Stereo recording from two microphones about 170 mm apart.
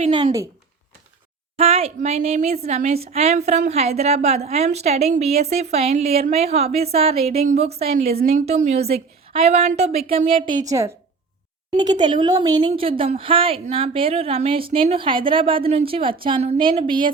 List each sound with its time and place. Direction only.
0.1 s speech: 25° right (ahead or behind)
1.5 s a woman's voice: 35° right (ahead or behind)
10.7 s a woman's voice: 20° right (ahead or behind)